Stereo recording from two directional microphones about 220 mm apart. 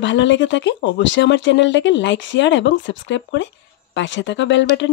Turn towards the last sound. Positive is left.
turn(degrees=55)  # may be behind; listen again after turning